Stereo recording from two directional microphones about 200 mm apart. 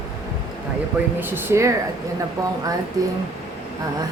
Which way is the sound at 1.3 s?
10° right (ahead or behind).